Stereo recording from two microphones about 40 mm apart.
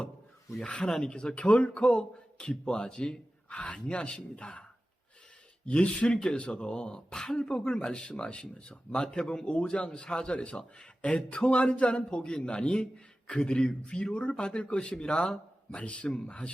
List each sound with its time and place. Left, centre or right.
0.6 s a man's voice: left
5.6 s a man's voice: left
8.9 s a man's voice: centre